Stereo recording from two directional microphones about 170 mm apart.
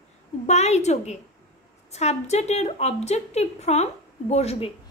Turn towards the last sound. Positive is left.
turn(degrees=35)  # may be behind; listen again after turning